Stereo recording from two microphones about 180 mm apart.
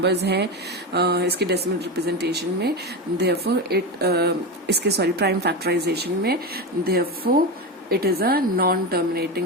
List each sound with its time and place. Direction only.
0.0 s speech: 65° right (ahead or behind)